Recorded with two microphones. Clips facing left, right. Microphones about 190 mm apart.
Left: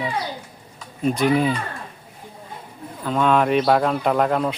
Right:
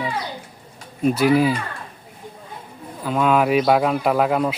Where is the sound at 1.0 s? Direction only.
5° right (ahead or behind).